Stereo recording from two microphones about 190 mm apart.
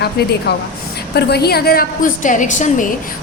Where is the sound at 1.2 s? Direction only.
60° left (ahead or behind); by 2.9 s 40° left (ahead or behind).